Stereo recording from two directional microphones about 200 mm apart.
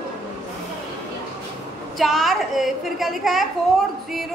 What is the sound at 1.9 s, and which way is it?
A woman's voice, centre (ahead or behind).